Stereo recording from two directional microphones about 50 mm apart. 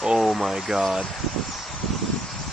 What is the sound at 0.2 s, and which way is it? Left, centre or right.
Speech, centre.